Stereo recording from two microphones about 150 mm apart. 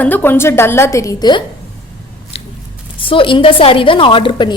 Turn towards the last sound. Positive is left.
turn(degrees=35)  # may be behind; listen again after turning